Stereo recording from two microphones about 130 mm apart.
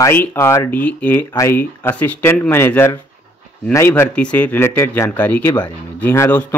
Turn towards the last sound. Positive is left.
turn(degrees=15)  # may be behind; listen again after turning